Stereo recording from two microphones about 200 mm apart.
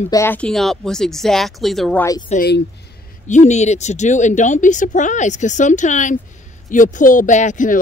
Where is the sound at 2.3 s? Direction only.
45° left (ahead or behind).